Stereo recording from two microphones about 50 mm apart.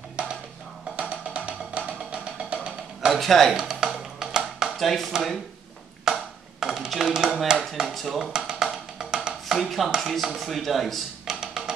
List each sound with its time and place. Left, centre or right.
0.2 s a sound: right
0.9 s music: right
3.1 s speech: centre
3.5 s music: centre
4.7 s speech: centre
6.1 s a sound: centre
7.5 s a sound: centre
7.8 s speech: centre
8.3 s music: centre
9.9 s speech: centre
11.2 s music: centre